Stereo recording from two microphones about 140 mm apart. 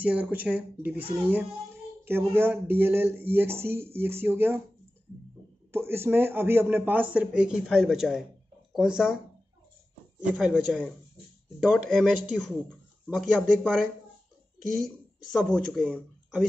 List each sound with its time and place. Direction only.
0.0 s a man's voice: 10° right (ahead or behind)
2.0 s a man's voice: 15° right (ahead or behind)
5.7 s a man's voice: 15° right (ahead or behind)
10.3 s speech: centre (ahead or behind)
15.3 s speech: centre (ahead or behind)